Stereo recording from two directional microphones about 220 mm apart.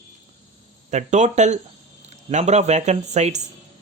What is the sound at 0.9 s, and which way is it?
Speech, 30° right (ahead or behind).